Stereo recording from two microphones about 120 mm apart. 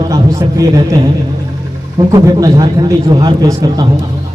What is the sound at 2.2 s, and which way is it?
A man's voice, 30° right (ahead or behind).